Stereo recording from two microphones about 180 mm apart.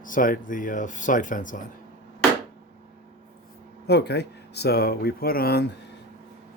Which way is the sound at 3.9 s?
65° left (ahead or behind).